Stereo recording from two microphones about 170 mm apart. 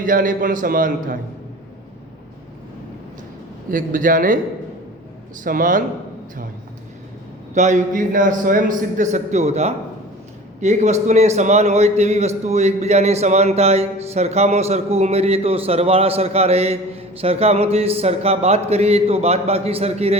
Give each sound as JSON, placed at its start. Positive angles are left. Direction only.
{"t": 0.0, "sound": "a man's voice", "side_deg": -50}
{"t": 3.7, "sound": "a man's voice", "side_deg": -50}
{"t": 5.4, "sound": "a man's voice", "side_deg": -50}
{"t": 7.5, "sound": "a man's voice", "side_deg": -45}